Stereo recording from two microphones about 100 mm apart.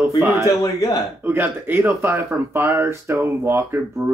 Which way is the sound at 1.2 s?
20° right (ahead or behind).